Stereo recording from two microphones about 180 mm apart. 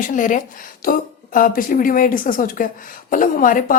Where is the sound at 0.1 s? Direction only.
45° left (ahead or behind).